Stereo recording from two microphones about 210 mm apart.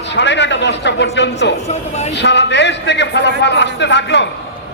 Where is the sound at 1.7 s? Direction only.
30° left (ahead or behind).